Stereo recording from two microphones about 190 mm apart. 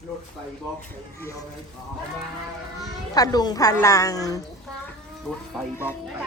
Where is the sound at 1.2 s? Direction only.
15° left (ahead or behind).